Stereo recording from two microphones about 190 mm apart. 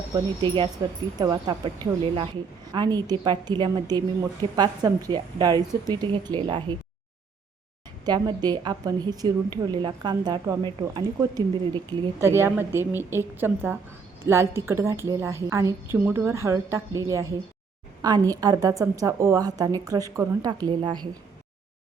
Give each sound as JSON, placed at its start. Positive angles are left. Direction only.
{"t": 0.1, "sound": "a woman's voice", "side_deg": -25}
{"t": 8.0, "sound": "a woman's voice", "side_deg": -20}